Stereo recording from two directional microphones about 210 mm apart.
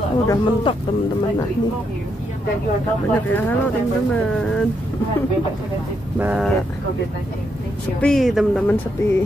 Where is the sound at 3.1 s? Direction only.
10° left (ahead or behind).